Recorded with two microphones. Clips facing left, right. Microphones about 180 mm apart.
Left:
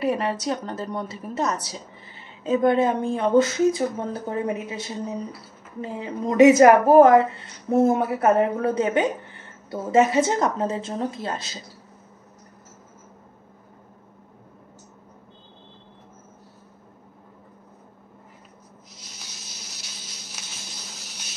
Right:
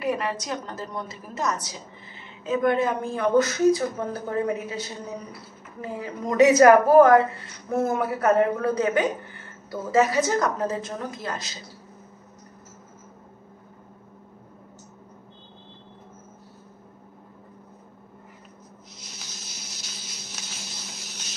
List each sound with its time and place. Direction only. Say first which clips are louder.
0.0 s a woman's voice: left 3 dB; 30° left (ahead or behind)